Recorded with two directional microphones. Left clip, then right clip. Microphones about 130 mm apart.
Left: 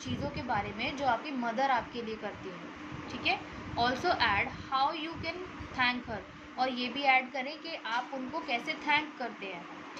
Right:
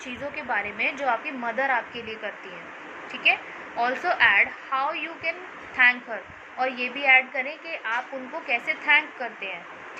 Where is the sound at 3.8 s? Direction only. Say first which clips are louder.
Right 7 dB; 20° left (ahead or behind).